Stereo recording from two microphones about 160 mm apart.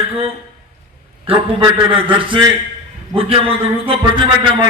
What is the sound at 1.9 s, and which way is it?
A man's voice, 30° right (ahead or behind).